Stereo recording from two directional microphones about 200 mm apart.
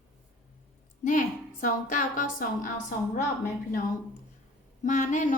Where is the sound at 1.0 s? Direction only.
40° left (ahead or behind).